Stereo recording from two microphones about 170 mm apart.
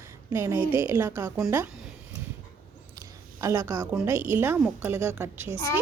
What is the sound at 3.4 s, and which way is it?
A woman's voice, 20° right (ahead or behind).